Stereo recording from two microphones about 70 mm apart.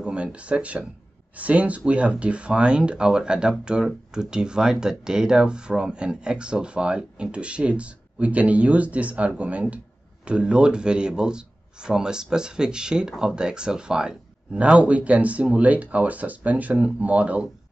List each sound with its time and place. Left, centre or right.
0.0 s speech: centre